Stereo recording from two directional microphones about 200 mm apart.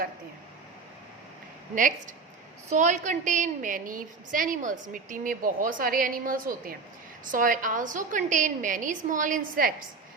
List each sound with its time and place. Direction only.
2.6 s a woman's voice: 40° right (ahead or behind)